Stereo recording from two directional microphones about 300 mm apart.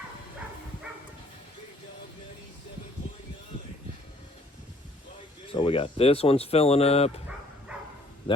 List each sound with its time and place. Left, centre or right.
5.5 s speech: centre